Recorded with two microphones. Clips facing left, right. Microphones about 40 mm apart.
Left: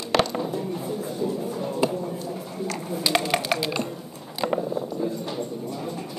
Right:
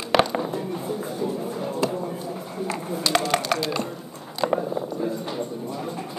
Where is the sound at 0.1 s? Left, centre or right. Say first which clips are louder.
Right 2 dB; centre.